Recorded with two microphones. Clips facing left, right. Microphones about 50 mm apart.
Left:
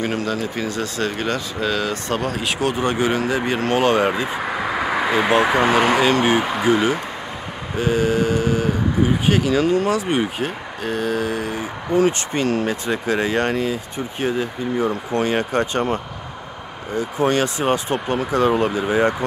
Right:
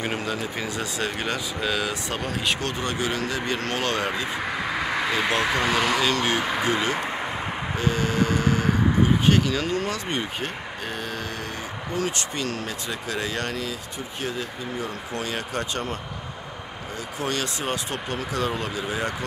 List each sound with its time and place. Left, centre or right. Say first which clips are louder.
0.0 s speech: left 5 dB; centre
2.6 s speech: left 7 dB; centre
6.1 s speech: left 6 dB; centre
11.9 s speech: left 10 dB; left
17.2 s speech: left 9 dB; left